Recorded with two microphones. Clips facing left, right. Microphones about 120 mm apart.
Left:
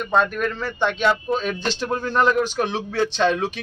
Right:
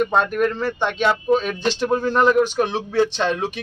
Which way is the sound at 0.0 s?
15° right (ahead or behind).